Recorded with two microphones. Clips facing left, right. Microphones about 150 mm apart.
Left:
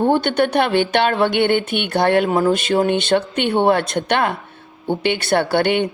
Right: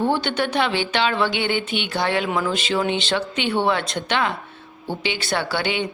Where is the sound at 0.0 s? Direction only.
50° left (ahead or behind).